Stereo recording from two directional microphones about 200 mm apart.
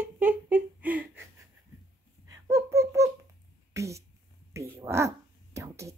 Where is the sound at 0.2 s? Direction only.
10° right (ahead or behind).